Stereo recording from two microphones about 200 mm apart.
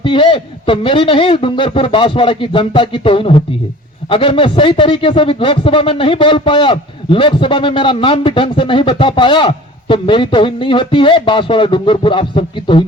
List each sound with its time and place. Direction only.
0.0 s speech: 25° left (ahead or behind)